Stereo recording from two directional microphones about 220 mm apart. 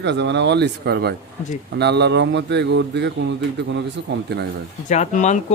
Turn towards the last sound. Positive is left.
turn(degrees=30)  # may be behind; listen again after turning